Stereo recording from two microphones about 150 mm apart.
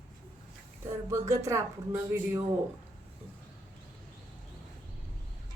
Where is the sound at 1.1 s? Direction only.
20° right (ahead or behind).